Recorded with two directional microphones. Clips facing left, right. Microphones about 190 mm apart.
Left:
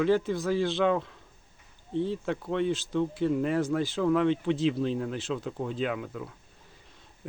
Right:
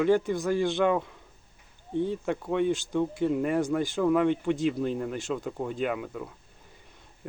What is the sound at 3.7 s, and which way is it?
Speech, 10° right (ahead or behind).